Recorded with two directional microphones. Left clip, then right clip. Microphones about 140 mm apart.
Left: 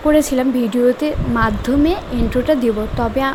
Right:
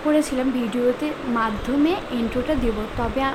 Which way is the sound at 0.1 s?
45° left (ahead or behind).